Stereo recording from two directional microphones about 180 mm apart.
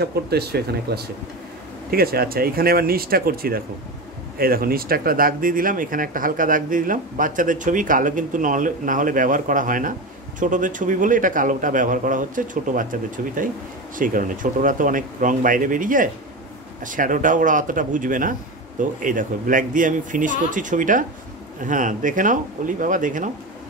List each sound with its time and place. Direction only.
0.0 s speech: 60° right (ahead or behind); by 23.3 s 45° right (ahead or behind)